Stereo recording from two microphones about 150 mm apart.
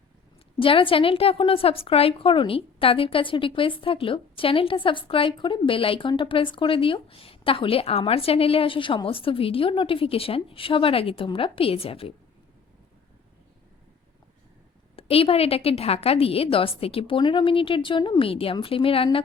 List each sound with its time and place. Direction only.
0.6 s a woman's voice: 35° left (ahead or behind)
14.9 s a woman's voice: 40° left (ahead or behind)